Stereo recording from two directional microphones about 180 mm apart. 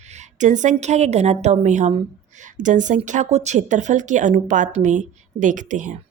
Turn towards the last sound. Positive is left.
turn(degrees=-45)  # may be behind; listen again after turning